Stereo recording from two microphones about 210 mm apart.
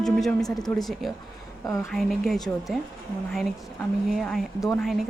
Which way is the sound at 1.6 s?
15° left (ahead or behind).